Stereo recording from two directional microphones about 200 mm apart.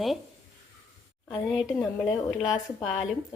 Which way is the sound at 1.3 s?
Centre (ahead or behind).